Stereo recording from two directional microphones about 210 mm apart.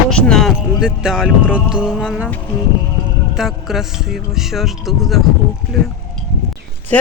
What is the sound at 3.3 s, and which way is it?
Speech, centre (ahead or behind).